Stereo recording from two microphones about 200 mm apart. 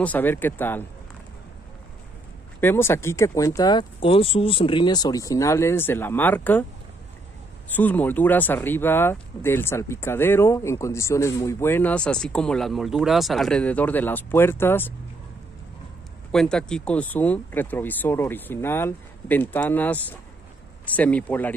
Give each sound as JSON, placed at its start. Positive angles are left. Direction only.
{"t": 0.0, "sound": "speech", "side_deg": 10}
{"t": 2.6, "sound": "speech", "side_deg": 10}
{"t": 7.7, "sound": "speech", "side_deg": 10}
{"t": 16.3, "sound": "speech", "side_deg": 5}